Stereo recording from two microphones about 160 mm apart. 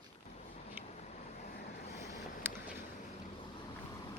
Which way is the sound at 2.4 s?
15° right (ahead or behind).